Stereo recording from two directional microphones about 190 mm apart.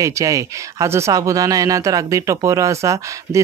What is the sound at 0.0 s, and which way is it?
Speech, 15° right (ahead or behind).